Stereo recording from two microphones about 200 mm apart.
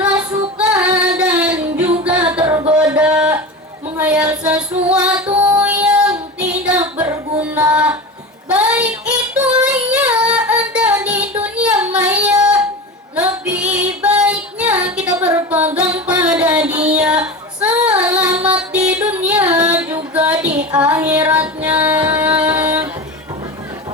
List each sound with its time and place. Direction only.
0.7 s singing: 5° right (ahead or behind)
1.7 s music: 35° right (ahead or behind)
2.4 s a sound: 20° right (ahead or behind)
3.9 s female singing: 5° right (ahead or behind)
4.4 s music: 5° right (ahead or behind)
8.4 s child singing: 5° right (ahead or behind)
15.3 s music: 10° right (ahead or behind)
16.9 s female singing: 5° right (ahead or behind)
18.4 s music: 5° right (ahead or behind)
20.1 s female singing: 5° right (ahead or behind)
20.7 s music: 5° right (ahead or behind)